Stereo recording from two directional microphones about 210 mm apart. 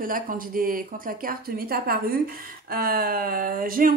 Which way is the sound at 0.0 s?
40° right (ahead or behind).